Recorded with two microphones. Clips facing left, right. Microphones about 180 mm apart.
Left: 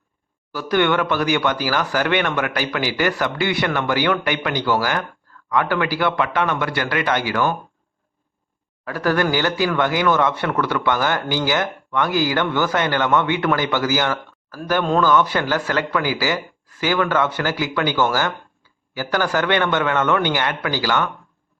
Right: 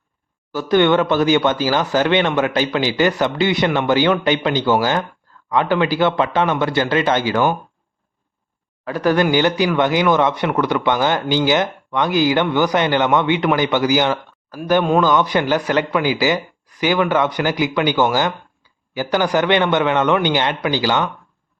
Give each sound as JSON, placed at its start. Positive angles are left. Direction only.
{"t": 0.5, "sound": "speech", "side_deg": -25}
{"t": 8.9, "sound": "speech", "side_deg": -20}